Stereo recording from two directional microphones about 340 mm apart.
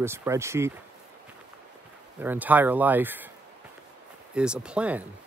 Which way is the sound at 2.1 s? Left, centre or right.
Centre.